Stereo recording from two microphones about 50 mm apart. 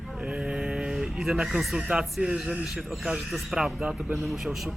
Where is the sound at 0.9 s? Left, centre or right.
Centre.